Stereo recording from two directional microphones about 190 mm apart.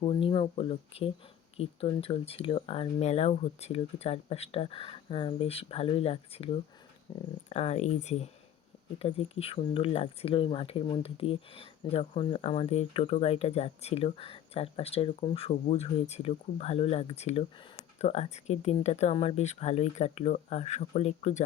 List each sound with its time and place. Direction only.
0.0 s speech: 30° left (ahead or behind)
7.1 s speech: 15° left (ahead or behind)
7.5 s speech: 35° left (ahead or behind)